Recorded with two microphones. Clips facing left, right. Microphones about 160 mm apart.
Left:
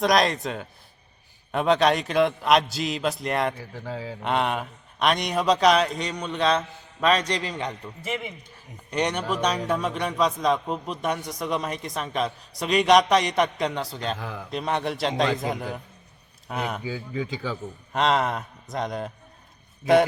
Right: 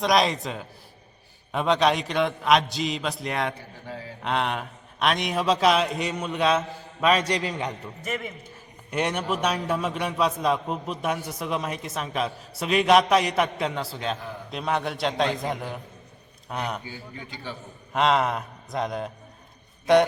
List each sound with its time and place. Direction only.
0.0 s a man's voice: centre (ahead or behind)
8.9 s a man's voice: 5° right (ahead or behind)
14.2 s a man's voice: 90° left
14.5 s a man's voice: centre (ahead or behind)
17.9 s a man's voice: centre (ahead or behind)